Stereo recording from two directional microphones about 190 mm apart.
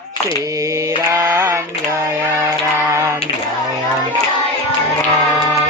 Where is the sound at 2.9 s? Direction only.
15° right (ahead or behind).